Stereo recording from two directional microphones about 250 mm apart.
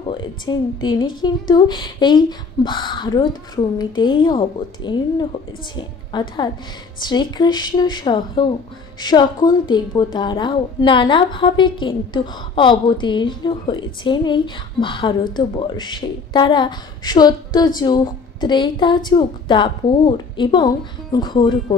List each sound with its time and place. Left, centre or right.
0.2 s a woman's voice: centre